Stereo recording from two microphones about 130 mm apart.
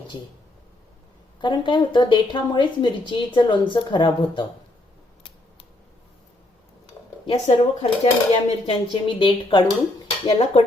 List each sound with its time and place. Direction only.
1.4 s speech: 35° left (ahead or behind)
7.3 s dishes: 40° left (ahead or behind)
7.8 s dishes: 55° left (ahead or behind)
8.7 s speech: 40° left (ahead or behind)
10.2 s dishes: 45° left (ahead or behind)